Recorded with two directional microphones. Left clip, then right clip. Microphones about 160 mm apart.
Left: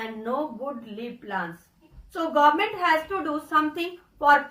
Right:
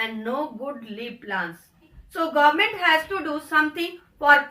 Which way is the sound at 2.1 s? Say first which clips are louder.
Right 1 dB; 15° right (ahead or behind).